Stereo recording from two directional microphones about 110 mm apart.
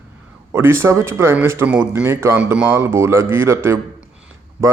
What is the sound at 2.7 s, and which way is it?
Speech, 25° right (ahead or behind).